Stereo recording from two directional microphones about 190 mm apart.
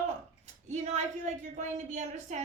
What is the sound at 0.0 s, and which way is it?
Speech, 35° right (ahead or behind).